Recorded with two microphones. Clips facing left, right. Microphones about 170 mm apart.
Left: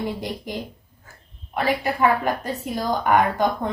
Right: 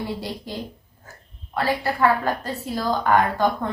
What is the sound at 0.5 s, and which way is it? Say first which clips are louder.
Speech: left 3 dB; 15° left (ahead or behind).